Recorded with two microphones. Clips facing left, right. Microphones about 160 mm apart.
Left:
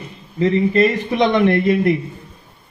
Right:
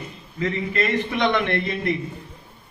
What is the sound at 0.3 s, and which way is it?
A man's voice, 35° left (ahead or behind).